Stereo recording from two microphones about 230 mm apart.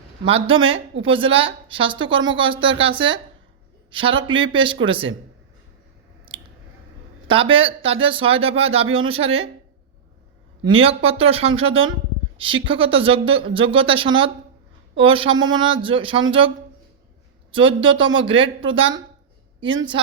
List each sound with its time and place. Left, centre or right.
0.3 s speech: right
2.1 s speech: right
2.4 s speech: right
6.3 s a sound: right
7.3 s speech: right
10.6 s speech: right
17.5 s speech: right